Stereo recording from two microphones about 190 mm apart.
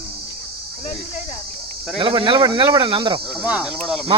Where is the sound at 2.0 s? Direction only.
25° right (ahead or behind).